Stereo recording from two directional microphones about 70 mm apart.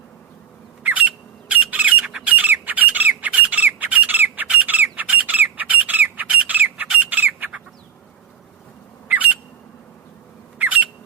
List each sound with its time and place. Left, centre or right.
0.9 s squawk: centre
2.2 s squawk: right
9.0 s squawk: right
10.6 s squawk: right